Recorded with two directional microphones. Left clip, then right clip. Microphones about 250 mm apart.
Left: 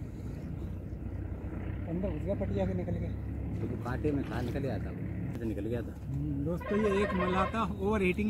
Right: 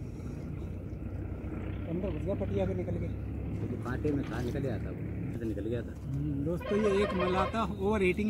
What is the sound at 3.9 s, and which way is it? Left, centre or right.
Speech, left.